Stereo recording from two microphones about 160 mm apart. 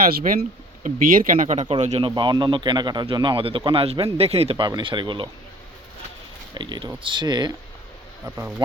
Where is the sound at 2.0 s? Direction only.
30° right (ahead or behind).